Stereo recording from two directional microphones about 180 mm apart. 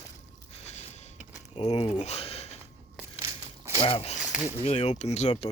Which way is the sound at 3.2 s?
15° right (ahead or behind).